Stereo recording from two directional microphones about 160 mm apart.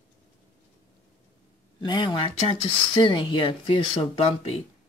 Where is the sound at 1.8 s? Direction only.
25° left (ahead or behind).